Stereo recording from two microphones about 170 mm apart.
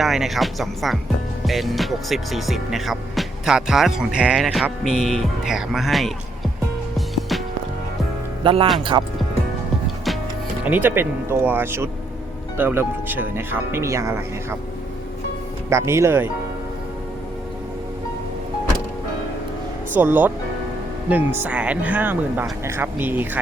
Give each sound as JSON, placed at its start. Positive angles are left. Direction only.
{"t": 0.0, "sound": "speech", "side_deg": 0}
{"t": 6.9, "sound": "music", "side_deg": 0}
{"t": 8.4, "sound": "speech", "side_deg": -30}
{"t": 10.6, "sound": "speech", "side_deg": -10}
{"t": 15.7, "sound": "speech", "side_deg": -15}
{"t": 19.9, "sound": "speech", "side_deg": -10}